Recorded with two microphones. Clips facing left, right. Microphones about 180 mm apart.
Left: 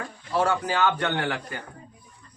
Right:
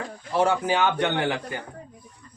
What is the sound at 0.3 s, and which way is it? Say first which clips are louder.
A man's voice: right 2 dB; 20° right (ahead or behind).